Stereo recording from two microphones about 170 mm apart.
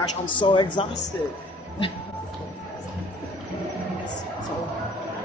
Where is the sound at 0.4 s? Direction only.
30° left (ahead or behind).